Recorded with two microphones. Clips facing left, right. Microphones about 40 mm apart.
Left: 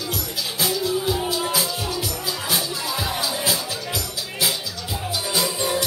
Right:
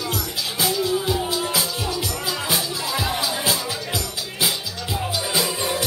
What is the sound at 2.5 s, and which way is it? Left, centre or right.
Music, centre.